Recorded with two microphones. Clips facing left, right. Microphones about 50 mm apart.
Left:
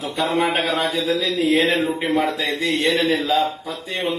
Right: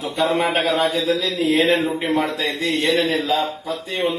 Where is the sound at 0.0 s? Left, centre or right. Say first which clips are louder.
Right 1 dB; centre.